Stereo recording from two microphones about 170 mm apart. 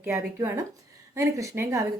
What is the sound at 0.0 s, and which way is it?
A woman's voice, 15° right (ahead or behind).